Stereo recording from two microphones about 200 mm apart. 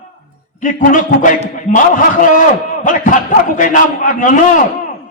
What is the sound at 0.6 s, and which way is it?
A man's voice, 40° left (ahead or behind).